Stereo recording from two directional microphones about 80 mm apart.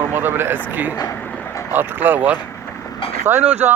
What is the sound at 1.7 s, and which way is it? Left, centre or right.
Speech, right.